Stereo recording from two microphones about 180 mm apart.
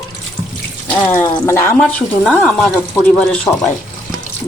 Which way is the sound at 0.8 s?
10° left (ahead or behind).